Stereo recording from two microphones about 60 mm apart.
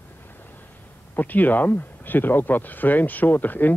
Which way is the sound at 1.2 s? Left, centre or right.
Left.